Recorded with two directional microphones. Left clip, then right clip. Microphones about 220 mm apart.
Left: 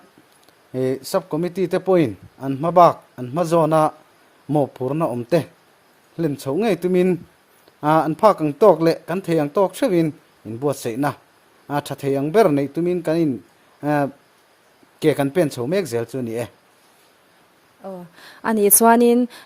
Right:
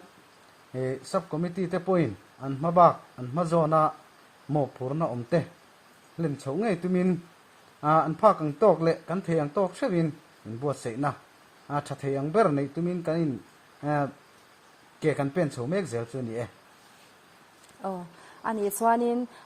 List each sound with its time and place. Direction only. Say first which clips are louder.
0.7 s speech: left 8 dB; 60° left (ahead or behind)
18.4 s speech: left 10 dB; 60° left (ahead or behind)